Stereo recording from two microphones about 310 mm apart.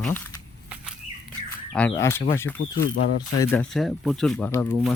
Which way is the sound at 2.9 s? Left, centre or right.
Left.